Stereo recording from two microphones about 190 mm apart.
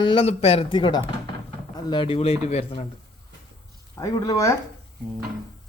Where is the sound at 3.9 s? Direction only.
15° left (ahead or behind).